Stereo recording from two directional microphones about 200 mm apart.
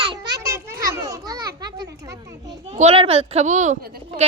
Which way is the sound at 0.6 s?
15° right (ahead or behind).